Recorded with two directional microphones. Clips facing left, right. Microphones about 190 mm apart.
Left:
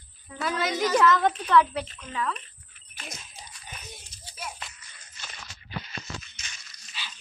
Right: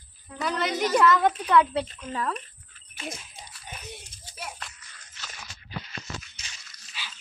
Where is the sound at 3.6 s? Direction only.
55° right (ahead or behind).